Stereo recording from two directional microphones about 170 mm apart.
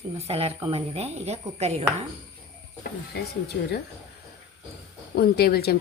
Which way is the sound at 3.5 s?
90° left.